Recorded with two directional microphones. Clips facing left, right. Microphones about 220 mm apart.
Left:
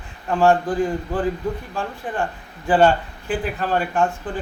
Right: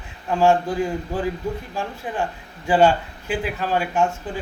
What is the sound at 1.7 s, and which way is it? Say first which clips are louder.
A man's voice: left 1 dB; 10° right (ahead or behind).